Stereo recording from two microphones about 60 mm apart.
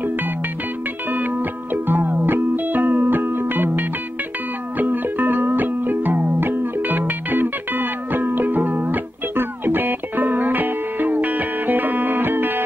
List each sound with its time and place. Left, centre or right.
0.0 s music: right